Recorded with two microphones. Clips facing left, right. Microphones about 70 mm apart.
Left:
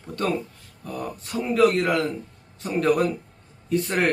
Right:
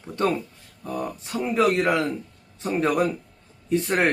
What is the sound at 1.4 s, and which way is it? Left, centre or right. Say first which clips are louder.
Speech: left 1 dB; centre.